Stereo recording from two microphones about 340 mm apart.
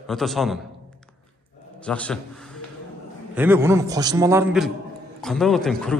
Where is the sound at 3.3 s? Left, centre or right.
Centre.